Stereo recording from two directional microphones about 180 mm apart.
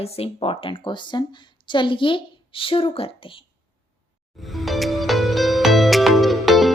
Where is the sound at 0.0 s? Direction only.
35° left (ahead or behind).